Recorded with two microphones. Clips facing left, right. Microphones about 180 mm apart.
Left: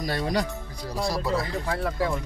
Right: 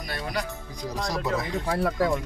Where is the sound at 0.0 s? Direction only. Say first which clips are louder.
Left 5 dB; 30° left (ahead or behind).